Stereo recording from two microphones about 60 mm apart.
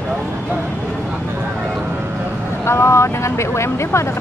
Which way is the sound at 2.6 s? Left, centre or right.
Left.